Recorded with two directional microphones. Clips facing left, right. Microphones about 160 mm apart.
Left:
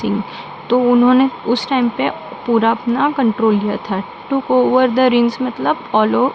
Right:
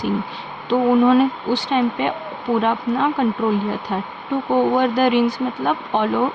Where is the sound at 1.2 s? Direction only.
90° left.